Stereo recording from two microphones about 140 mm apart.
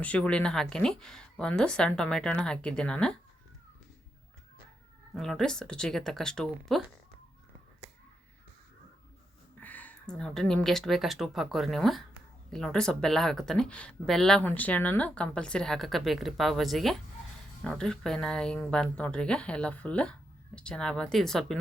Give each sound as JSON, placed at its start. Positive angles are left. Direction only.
{"t": 0.0, "sound": "speech", "side_deg": 10}
{"t": 5.1, "sound": "speech", "side_deg": 5}
{"t": 9.6, "sound": "speech", "side_deg": 10}